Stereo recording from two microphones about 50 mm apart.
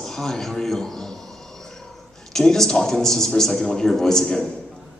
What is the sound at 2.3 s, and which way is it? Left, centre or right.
A man's voice, centre.